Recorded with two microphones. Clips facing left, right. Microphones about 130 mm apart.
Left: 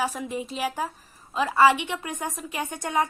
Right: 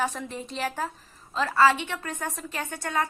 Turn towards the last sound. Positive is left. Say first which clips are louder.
# left 3 dB
turn(degrees=15)  # may be behind; listen again after turning